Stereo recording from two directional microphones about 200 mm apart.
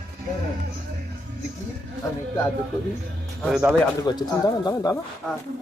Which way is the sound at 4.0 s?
20° left (ahead or behind).